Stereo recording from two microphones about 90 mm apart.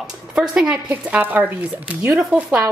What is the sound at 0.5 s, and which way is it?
A woman's voice, 15° right (ahead or behind).